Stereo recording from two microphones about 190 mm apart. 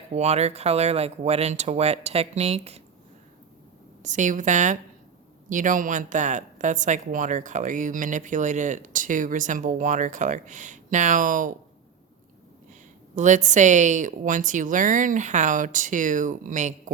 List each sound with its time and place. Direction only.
0.1 s speech: 35° right (ahead or behind)
4.0 s a woman's voice: 40° right (ahead or behind)
13.1 s speech: 40° right (ahead or behind)